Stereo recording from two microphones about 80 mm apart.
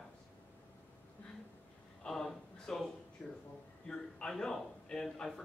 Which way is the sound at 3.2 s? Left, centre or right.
Left.